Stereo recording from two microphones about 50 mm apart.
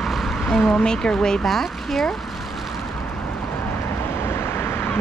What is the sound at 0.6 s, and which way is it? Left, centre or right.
Speech, left.